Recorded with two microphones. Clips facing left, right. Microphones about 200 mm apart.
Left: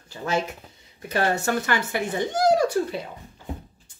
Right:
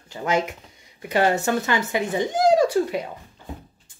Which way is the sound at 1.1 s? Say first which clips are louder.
Right 3 dB; 20° right (ahead or behind).